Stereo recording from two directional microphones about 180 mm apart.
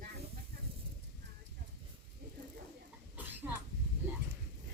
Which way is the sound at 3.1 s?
10° right (ahead or behind).